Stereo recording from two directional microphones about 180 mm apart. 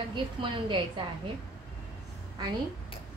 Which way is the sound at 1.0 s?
30° right (ahead or behind).